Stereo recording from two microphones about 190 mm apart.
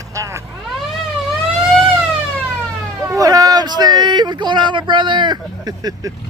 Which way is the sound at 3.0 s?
20° right (ahead or behind).